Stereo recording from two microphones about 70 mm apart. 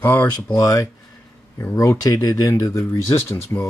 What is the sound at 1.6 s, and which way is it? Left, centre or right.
Speech, left.